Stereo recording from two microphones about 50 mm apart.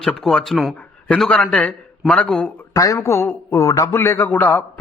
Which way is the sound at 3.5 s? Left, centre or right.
Left.